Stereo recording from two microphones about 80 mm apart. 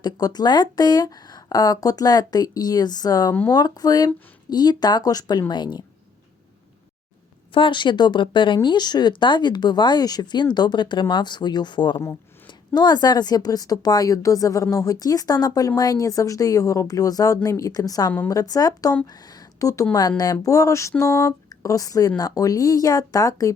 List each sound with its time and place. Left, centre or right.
0.0 s speech: left
7.5 s speech: left
8.6 s speech: left
12.5 s a woman's voice: left